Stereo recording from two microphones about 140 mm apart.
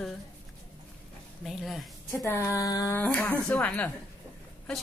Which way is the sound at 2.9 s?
15° left (ahead or behind).